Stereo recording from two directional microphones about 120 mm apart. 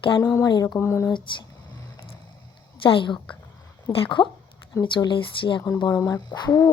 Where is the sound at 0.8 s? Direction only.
20° left (ahead or behind).